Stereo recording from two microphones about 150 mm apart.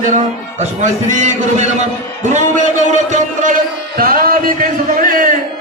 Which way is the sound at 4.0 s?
75° right (ahead or behind).